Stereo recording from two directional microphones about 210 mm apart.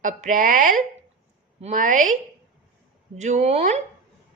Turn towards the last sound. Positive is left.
turn(degrees=-30)  # may be behind; listen again after turning